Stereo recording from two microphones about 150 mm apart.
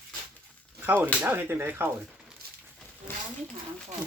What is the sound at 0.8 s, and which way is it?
Speech, 10° right (ahead or behind).